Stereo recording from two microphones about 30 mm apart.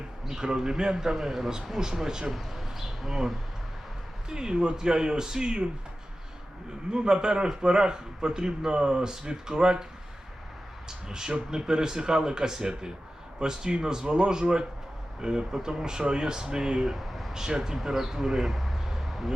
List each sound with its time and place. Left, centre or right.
0.3 s a man's voice: centre
1.1 s a man's voice: centre
2.3 s speech: centre
4.3 s a man's voice: right
6.9 s a man's voice: right
10.8 s a man's voice: right
16.9 s a sound: centre
17.3 s a man's voice: centre